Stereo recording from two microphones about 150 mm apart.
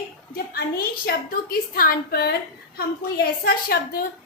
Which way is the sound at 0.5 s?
80° left.